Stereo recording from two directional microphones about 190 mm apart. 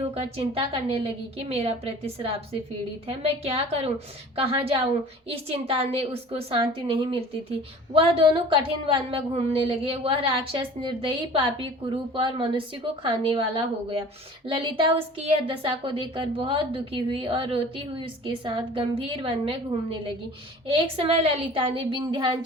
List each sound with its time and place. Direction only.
0.1 s a woman's voice: 30° right (ahead or behind)
20.7 s a woman's voice: 30° right (ahead or behind)